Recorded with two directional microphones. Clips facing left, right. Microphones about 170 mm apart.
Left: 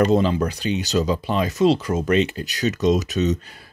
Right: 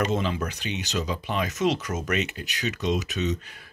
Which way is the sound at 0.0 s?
35° left (ahead or behind).